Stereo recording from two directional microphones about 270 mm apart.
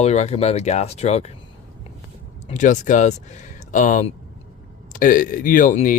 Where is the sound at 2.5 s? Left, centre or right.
Left.